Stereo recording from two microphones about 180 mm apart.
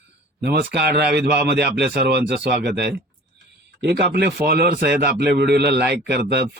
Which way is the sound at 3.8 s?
70° right (ahead or behind).